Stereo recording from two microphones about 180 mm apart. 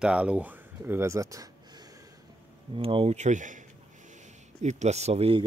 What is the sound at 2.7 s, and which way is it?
Speech, 30° right (ahead or behind).